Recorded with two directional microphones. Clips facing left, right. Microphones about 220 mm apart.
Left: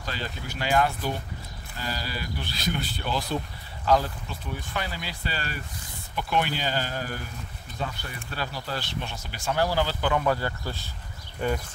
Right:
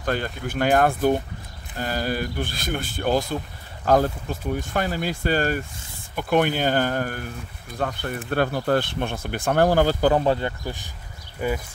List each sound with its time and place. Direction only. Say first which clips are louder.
0.0 s speech: right 9 dB; 55° right (ahead or behind); by 11.6 s 5° right (ahead or behind)